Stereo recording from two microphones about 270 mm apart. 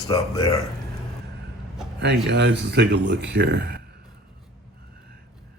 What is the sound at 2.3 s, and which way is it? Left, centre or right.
Speech, right.